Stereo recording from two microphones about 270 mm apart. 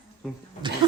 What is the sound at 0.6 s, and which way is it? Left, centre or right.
Speech, centre.